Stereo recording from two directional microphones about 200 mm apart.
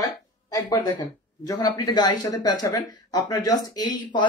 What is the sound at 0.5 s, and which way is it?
Speech, 20° left (ahead or behind).